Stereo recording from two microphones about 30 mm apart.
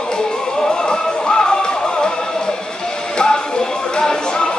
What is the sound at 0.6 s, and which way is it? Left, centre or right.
Music, left.